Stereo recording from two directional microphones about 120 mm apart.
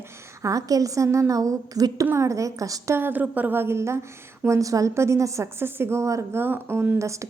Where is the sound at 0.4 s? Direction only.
30° right (ahead or behind).